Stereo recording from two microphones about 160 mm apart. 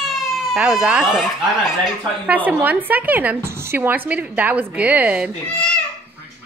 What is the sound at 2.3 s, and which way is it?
Speech, 10° right (ahead or behind).